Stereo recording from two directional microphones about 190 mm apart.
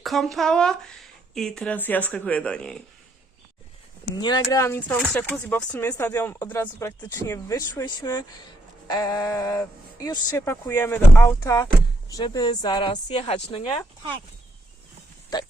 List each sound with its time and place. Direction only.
0.0 s speech: centre (ahead or behind)
4.0 s speech: 25° left (ahead or behind)